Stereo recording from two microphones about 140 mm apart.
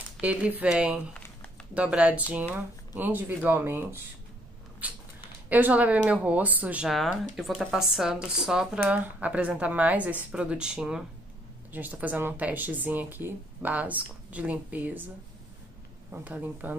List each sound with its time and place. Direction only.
0.2 s speech: 10° right (ahead or behind)
4.8 s patter: 10° right (ahead or behind)
5.5 s a woman's voice: 10° right (ahead or behind)
16.1 s speech: 10° right (ahead or behind)